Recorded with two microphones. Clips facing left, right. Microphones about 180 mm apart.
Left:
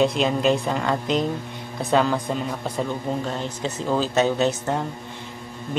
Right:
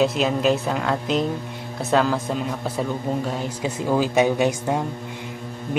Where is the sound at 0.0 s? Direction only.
5° right (ahead or behind).